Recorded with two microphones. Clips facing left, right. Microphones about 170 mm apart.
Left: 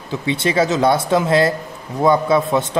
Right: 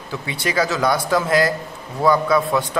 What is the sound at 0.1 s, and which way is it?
Speech, 25° left (ahead or behind).